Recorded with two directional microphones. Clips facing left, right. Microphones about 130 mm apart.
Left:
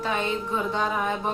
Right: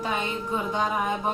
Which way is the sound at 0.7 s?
15° right (ahead or behind).